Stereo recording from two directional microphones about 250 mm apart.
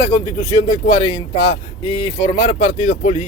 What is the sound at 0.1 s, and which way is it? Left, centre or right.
Speech, left.